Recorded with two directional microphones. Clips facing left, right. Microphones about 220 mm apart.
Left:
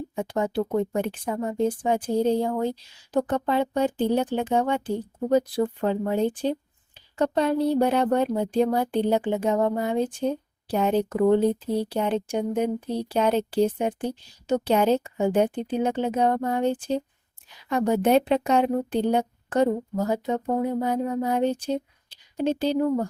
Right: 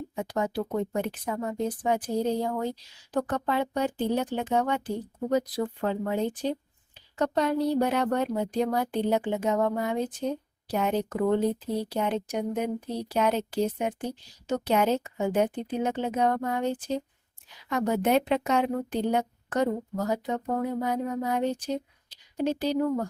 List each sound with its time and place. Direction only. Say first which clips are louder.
0.2 s a woman's voice: left 4 dB; 30° left (ahead or behind)